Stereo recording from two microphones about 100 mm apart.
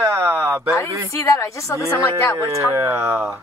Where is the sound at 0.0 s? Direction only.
25° right (ahead or behind).